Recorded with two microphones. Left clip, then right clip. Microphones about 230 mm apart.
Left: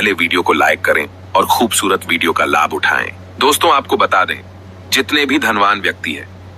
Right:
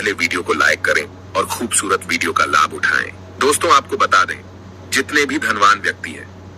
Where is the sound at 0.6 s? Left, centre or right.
Left.